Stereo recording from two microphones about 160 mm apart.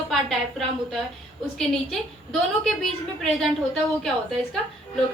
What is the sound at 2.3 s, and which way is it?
A woman's voice, centre (ahead or behind).